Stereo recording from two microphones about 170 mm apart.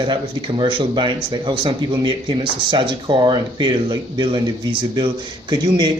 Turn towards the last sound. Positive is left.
turn(degrees=-25)  # may be behind; listen again after turning